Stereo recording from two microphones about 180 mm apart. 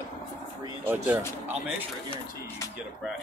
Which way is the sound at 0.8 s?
10° right (ahead or behind).